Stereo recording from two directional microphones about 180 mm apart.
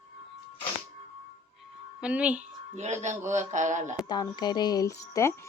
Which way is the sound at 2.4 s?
40° right (ahead or behind).